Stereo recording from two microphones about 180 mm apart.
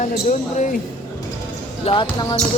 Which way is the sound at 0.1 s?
45° left (ahead or behind).